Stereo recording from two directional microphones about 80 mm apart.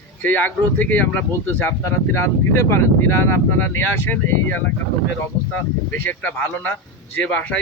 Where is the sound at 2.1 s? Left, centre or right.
Left.